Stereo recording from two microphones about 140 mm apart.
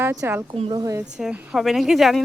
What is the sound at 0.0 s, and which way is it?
A woman's voice, 15° right (ahead or behind).